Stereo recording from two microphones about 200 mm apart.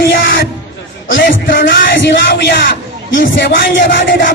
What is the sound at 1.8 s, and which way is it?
Speech, 65° left (ahead or behind).